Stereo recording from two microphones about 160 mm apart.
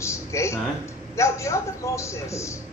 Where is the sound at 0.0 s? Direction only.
15° left (ahead or behind).